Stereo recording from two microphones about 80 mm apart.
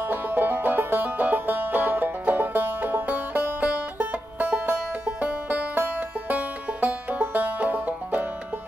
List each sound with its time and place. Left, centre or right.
0.0 s music: right